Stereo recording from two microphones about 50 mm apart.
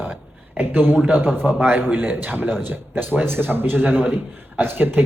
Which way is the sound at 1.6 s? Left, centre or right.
Right.